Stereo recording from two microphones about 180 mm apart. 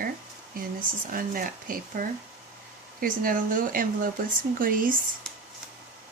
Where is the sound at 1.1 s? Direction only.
50° right (ahead or behind).